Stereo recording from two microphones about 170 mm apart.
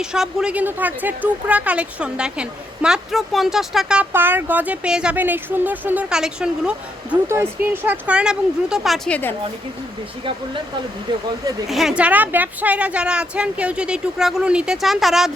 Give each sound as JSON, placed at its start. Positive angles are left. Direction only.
{"t": 0.0, "sound": "speech", "side_deg": -5}
{"t": 11.1, "sound": "speech", "side_deg": -25}
{"t": 11.7, "sound": "speech", "side_deg": 0}